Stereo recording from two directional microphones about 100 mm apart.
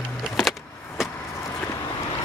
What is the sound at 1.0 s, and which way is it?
Vehicle, 5° right (ahead or behind).